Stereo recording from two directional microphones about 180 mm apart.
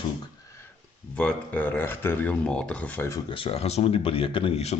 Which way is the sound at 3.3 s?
30° left (ahead or behind).